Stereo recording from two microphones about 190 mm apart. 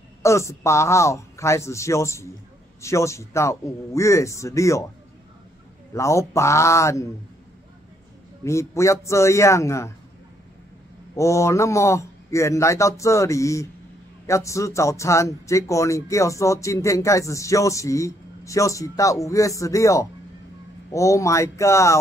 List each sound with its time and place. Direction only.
0.2 s a man's voice: 15° left (ahead or behind)
5.9 s a man's voice: 15° left (ahead or behind)
8.5 s a man's voice: 15° left (ahead or behind)
11.1 s a man's voice: 15° left (ahead or behind)